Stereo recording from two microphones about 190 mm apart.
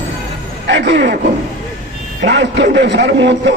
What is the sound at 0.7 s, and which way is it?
Speech, 70° right (ahead or behind).